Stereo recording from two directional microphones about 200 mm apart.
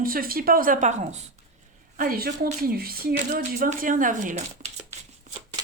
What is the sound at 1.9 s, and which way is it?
A woman's voice, 45° right (ahead or behind).